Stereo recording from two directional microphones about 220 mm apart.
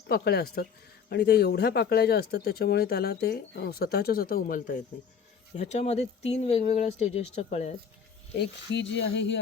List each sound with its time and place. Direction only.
0.1 s speech: 45° left (ahead or behind); by 7.7 s 30° left (ahead or behind)
8.7 s speech: 55° left (ahead or behind)